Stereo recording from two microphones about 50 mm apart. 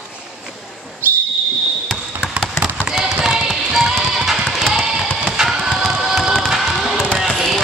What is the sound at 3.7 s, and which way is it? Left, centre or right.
Music, centre.